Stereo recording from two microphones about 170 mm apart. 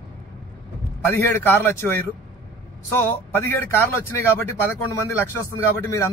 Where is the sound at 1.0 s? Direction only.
10° left (ahead or behind).